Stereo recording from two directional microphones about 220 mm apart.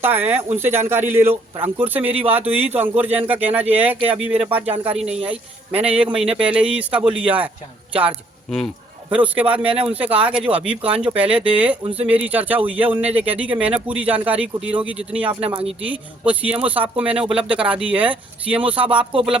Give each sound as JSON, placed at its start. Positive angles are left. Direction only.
{"t": 0.0, "sound": "speech", "side_deg": -10}
{"t": 5.2, "sound": "a man's voice", "side_deg": -25}
{"t": 5.8, "sound": "a man's voice", "side_deg": -5}
{"t": 15.2, "sound": "a man's voice", "side_deg": -25}
{"t": 15.8, "sound": "speech", "side_deg": -5}
{"t": 18.9, "sound": "a man's voice", "side_deg": -25}